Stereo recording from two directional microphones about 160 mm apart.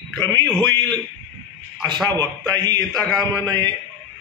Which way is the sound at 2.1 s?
25° right (ahead or behind).